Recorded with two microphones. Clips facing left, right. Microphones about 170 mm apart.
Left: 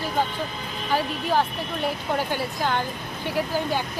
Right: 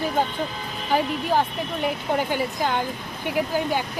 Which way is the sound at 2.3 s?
10° right (ahead or behind).